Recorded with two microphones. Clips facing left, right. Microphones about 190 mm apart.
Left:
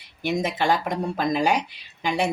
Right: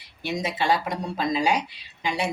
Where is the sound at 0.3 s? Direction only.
50° left (ahead or behind).